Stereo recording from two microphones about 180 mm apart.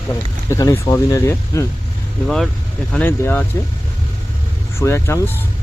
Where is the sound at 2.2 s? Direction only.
5° left (ahead or behind).